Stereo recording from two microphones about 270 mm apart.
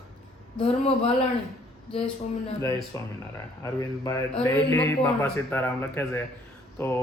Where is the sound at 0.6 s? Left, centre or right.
Left.